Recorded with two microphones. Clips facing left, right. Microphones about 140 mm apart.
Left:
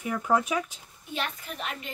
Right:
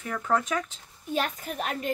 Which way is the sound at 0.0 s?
10° left (ahead or behind).